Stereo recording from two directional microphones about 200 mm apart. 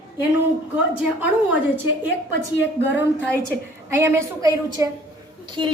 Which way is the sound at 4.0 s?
10° right (ahead or behind).